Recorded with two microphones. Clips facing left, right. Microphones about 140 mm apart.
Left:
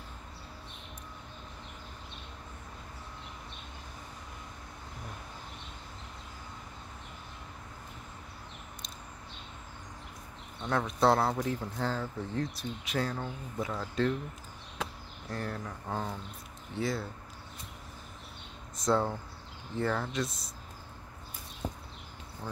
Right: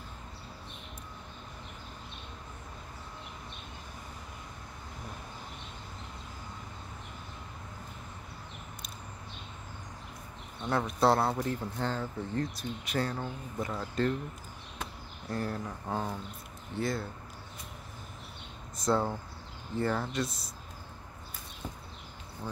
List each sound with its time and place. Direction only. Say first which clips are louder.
10.7 s speech: even; 5° right (ahead or behind)
15.2 s speech: right 3 dB; 5° right (ahead or behind)
18.8 s speech: even; centre (ahead or behind)
21.6 s a sound: left 4 dB; 15° left (ahead or behind)